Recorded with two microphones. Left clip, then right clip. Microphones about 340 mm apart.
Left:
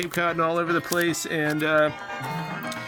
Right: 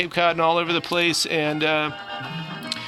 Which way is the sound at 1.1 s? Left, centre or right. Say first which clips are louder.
Right 6 dB; centre.